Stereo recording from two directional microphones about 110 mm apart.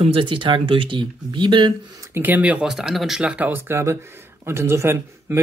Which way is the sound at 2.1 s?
15° right (ahead or behind).